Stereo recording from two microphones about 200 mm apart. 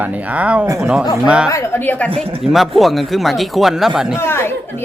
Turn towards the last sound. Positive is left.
turn(degrees=10)  # may be behind; listen again after turning